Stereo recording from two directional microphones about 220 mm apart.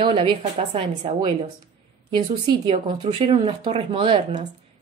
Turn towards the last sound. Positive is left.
turn(degrees=-20)  # may be behind; listen again after turning